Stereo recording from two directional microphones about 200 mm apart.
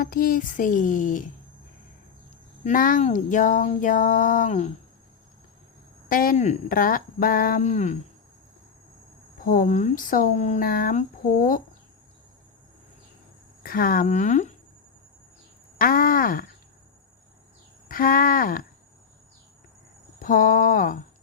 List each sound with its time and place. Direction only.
0.0 s speech: 45° left (ahead or behind)
2.6 s speech: 40° left (ahead or behind)
6.1 s speech: 45° left (ahead or behind)
9.4 s speech: 45° left (ahead or behind)
13.6 s speech: 45° left (ahead or behind)
15.8 s speech: 45° left (ahead or behind)
17.8 s speech: 45° left (ahead or behind)
20.1 s speech: 45° left (ahead or behind)